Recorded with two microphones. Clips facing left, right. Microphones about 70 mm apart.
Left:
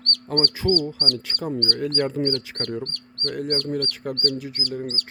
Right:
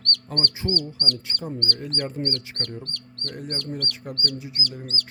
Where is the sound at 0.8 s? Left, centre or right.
Left.